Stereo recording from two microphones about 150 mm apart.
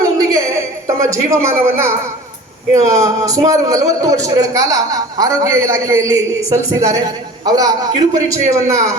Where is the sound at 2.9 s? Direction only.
20° right (ahead or behind).